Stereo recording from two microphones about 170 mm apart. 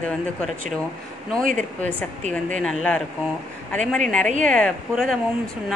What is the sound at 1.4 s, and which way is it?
Speech, 50° right (ahead or behind).